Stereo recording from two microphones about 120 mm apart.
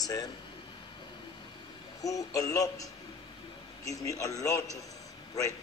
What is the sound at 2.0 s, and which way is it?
A man's voice, 30° left (ahead or behind).